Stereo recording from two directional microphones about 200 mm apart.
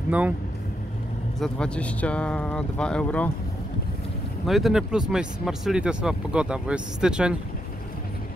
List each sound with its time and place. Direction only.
1.4 s speech: 5° left (ahead or behind)
4.5 s speech: centre (ahead or behind)